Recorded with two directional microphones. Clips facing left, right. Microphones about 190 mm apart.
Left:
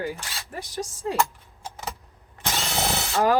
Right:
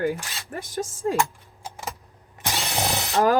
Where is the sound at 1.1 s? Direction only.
10° right (ahead or behind).